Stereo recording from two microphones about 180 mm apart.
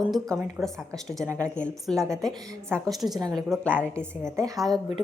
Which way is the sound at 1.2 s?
15° right (ahead or behind).